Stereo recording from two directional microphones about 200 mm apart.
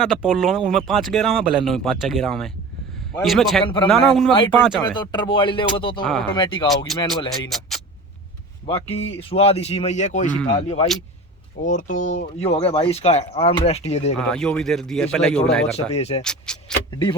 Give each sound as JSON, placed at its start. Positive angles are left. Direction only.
{"t": 0.0, "sound": "speech", "side_deg": 0}
{"t": 3.6, "sound": "speech", "side_deg": 25}
{"t": 3.8, "sound": "speech", "side_deg": 5}
{"t": 4.3, "sound": "speech", "side_deg": 25}
{"t": 6.9, "sound": "speech", "side_deg": 0}
{"t": 8.6, "sound": "speech", "side_deg": 30}
{"t": 14.2, "sound": "speech", "side_deg": 5}
{"t": 15.7, "sound": "speech", "side_deg": 30}
{"t": 16.2, "sound": "speech", "side_deg": 5}
{"t": 16.9, "sound": "speech", "side_deg": 20}